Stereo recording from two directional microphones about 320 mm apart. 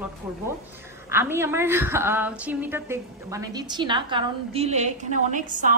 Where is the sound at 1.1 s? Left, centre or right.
Centre.